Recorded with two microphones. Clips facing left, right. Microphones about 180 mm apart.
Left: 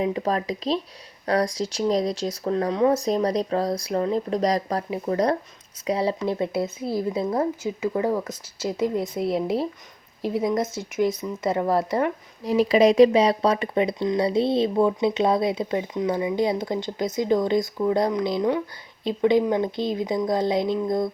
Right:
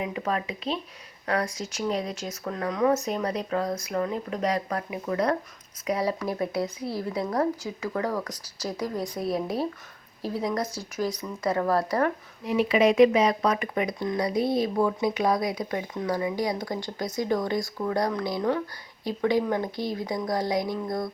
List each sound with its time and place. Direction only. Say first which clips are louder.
0.0 s speech: left 5 dB; 35° left (ahead or behind)
12.5 s speech: left 4 dB; 35° left (ahead or behind)